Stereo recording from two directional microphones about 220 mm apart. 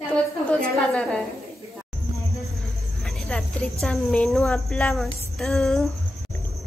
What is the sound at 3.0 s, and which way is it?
Cricket, centre (ahead or behind).